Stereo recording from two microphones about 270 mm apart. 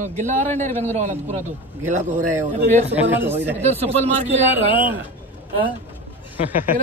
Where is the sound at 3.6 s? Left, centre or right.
Right.